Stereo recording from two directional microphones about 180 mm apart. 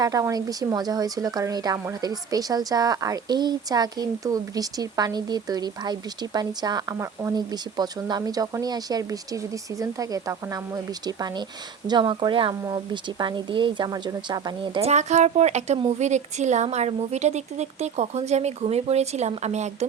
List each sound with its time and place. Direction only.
0.0 s a woman's voice: 20° right (ahead or behind); by 19.7 s 40° right (ahead or behind)